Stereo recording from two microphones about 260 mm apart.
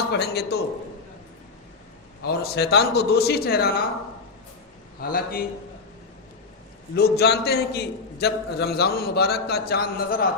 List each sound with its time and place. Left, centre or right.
0.1 s a man's voice: left
2.2 s a man's voice: left
4.9 s a man's voice: left
6.9 s a man's voice: left